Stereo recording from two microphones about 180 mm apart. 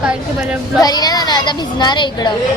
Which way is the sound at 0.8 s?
20° left (ahead or behind).